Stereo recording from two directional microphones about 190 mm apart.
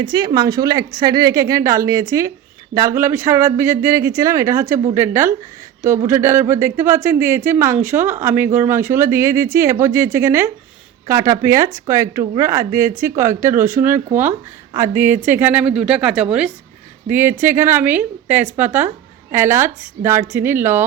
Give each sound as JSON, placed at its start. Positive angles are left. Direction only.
{"t": 0.0, "sound": "a woman's voice", "side_deg": -25}